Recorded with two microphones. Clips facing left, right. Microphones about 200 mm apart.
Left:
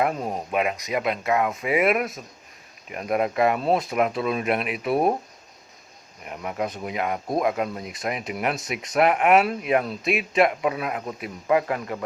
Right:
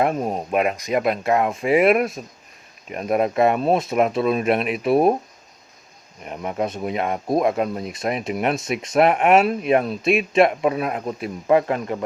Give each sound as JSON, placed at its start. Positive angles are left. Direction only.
{"t": 0.5, "sound": "speech", "side_deg": -50}
{"t": 6.2, "sound": "speech", "side_deg": -30}